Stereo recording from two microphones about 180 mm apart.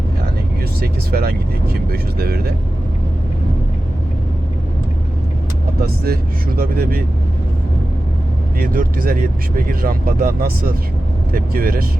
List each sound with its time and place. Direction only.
0.8 s speech: 60° right (ahead or behind)
6.6 s speech: 55° right (ahead or behind)
8.5 s speech: 55° right (ahead or behind)